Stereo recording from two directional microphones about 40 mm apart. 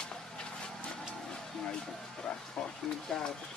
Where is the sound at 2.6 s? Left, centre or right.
Left.